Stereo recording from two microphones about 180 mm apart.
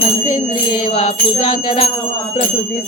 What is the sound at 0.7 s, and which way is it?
Music, 35° left (ahead or behind).